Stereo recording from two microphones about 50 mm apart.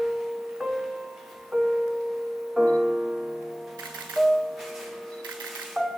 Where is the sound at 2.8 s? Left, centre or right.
Centre.